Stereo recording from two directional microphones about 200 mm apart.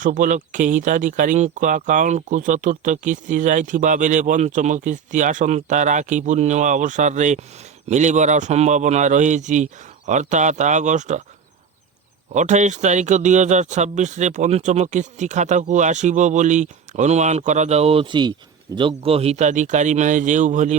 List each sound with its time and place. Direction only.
0.0 s speech: 40° right (ahead or behind)
12.3 s speech: 35° right (ahead or behind)